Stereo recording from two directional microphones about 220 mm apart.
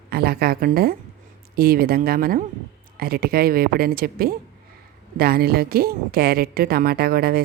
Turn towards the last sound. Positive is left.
turn(degrees=-45)  # may be behind; listen again after turning